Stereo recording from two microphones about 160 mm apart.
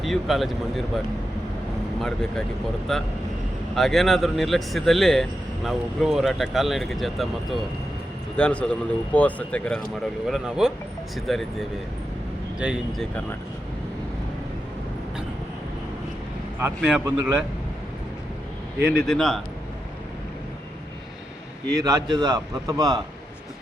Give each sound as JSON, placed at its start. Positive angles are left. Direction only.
{"t": 0.0, "sound": "speech", "side_deg": 0}
{"t": 2.0, "sound": "speech", "side_deg": 5}
{"t": 8.4, "sound": "speech", "side_deg": 5}
{"t": 12.5, "sound": "speech", "side_deg": -5}
{"t": 16.6, "sound": "a man's voice", "side_deg": -10}
{"t": 18.8, "sound": "speech", "side_deg": -75}
{"t": 19.0, "sound": "speech", "side_deg": 0}
{"t": 21.7, "sound": "a man's voice", "side_deg": -25}